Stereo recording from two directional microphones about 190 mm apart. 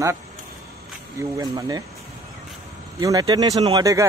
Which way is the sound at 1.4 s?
20° right (ahead or behind).